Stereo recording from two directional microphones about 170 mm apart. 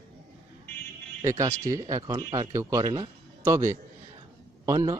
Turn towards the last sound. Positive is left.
turn(degrees=-20)  # may be behind; listen again after turning